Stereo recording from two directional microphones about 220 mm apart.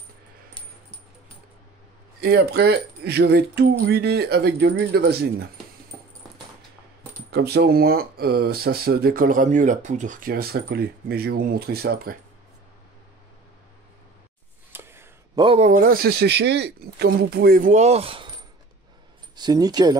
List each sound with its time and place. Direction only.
2.2 s speech: 45° right (ahead or behind)
7.2 s speech: 45° right (ahead or behind)
14.7 s a sound: 10° right (ahead or behind)
15.4 s speech: 30° right (ahead or behind)
19.3 s speech: 20° right (ahead or behind)